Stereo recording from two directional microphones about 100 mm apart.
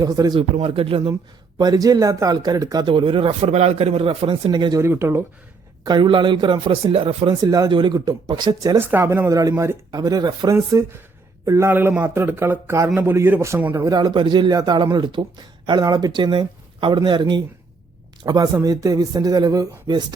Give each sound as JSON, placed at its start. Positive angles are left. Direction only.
{"t": 0.0, "sound": "a man's voice", "side_deg": -40}
{"t": 0.3, "sound": "speech", "side_deg": -65}
{"t": 1.5, "sound": "a man's voice", "side_deg": -40}
{"t": 2.8, "sound": "speech", "side_deg": -60}
{"t": 4.8, "sound": "a man's voice", "side_deg": -25}
{"t": 5.8, "sound": "speech", "side_deg": -50}
{"t": 7.4, "sound": "a man's voice", "side_deg": -40}
{"t": 7.7, "sound": "speech", "side_deg": -55}
{"t": 8.9, "sound": "a man's voice", "side_deg": -25}
{"t": 9.9, "sound": "a man's voice", "side_deg": -45}
{"t": 13.8, "sound": "speech", "side_deg": -45}
{"t": 18.3, "sound": "a man's voice", "side_deg": -40}